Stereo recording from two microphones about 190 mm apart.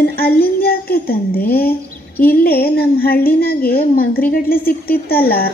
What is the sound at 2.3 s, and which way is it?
A woman's voice, 55° left (ahead or behind).